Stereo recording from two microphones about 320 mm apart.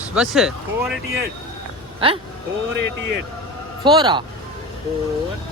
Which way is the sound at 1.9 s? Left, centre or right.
Centre.